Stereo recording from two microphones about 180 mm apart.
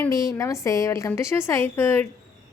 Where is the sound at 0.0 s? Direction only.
20° left (ahead or behind).